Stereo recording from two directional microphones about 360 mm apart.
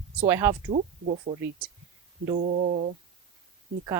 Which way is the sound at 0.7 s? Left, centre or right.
Centre.